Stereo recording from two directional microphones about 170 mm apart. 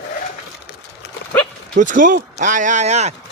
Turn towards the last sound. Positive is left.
turn(degrees=-40)  # may be behind; listen again after turning